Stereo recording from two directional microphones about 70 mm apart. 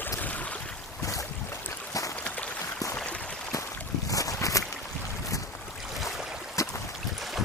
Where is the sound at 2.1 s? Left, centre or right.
Centre.